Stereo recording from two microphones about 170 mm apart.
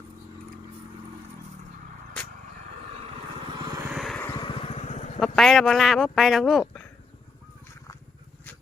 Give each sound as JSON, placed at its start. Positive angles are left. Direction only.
{"t": 3.4, "sound": "vehicle", "side_deg": -25}
{"t": 3.8, "sound": "vehicle", "side_deg": 0}
{"t": 4.2, "sound": "vehicle", "side_deg": 25}
{"t": 5.2, "sound": "speech", "side_deg": 0}